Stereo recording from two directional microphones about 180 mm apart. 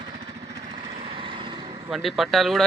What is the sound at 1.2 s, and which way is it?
Vehicle, 30° right (ahead or behind).